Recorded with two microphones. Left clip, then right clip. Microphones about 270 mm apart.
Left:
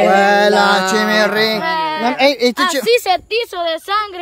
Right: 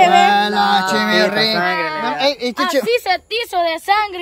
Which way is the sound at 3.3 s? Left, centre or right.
Centre.